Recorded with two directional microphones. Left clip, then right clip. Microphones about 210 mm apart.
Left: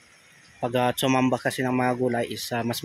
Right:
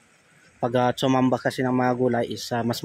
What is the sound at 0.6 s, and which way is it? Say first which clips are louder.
Speech: right 2 dB; 20° right (ahead or behind).